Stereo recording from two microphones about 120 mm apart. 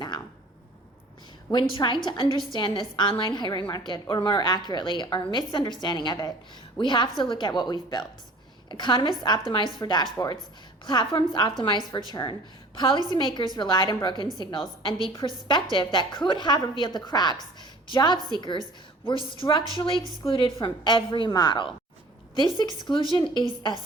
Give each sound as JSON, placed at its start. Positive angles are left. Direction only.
{"t": 1.5, "sound": "a woman's voice", "side_deg": 40}